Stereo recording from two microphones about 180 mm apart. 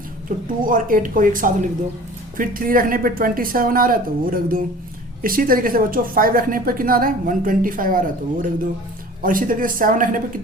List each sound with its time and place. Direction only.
0.3 s a woman's voice: 50° right (ahead or behind)